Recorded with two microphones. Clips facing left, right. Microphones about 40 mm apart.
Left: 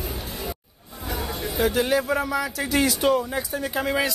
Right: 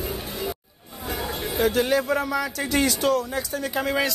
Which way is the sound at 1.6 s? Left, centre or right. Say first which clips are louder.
Even; centre.